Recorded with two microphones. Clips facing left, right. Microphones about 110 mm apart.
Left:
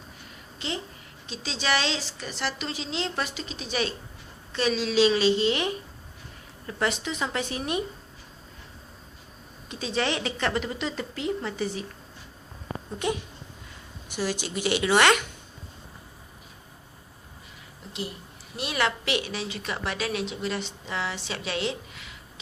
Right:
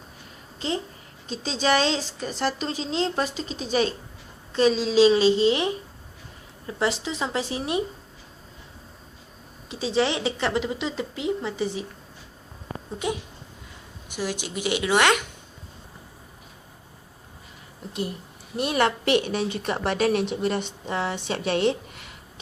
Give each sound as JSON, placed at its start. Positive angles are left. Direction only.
{"t": 0.6, "sound": "a woman's voice", "side_deg": -40}
{"t": 9.6, "sound": "a woman's voice", "side_deg": -25}
{"t": 13.0, "sound": "a woman's voice", "side_deg": -10}
{"t": 18.5, "sound": "a woman's voice", "side_deg": -45}